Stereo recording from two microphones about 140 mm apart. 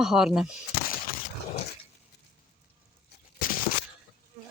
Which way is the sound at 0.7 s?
90° left.